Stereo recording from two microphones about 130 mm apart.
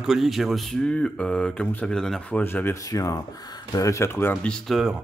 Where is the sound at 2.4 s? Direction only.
15° left (ahead or behind).